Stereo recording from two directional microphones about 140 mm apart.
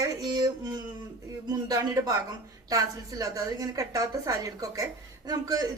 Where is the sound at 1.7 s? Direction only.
25° right (ahead or behind).